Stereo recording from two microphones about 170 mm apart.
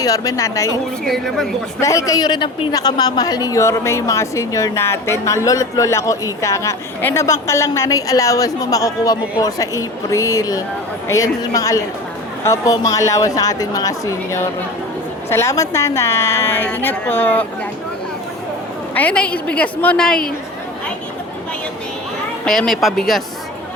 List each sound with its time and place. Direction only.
0.0 s a woman's voice: 20° left (ahead or behind)
1.0 s speech: centre (ahead or behind)
1.8 s a woman's voice: 20° left (ahead or behind)
18.9 s a woman's voice: 10° left (ahead or behind)
22.4 s speech: 5° left (ahead or behind)